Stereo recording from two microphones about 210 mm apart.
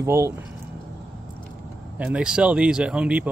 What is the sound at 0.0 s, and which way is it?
Speech, 10° right (ahead or behind).